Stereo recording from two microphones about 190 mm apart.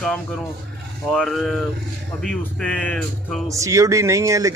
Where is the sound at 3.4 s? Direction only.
15° right (ahead or behind).